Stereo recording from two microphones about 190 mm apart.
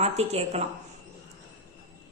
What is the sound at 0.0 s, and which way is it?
Speech, 35° right (ahead or behind).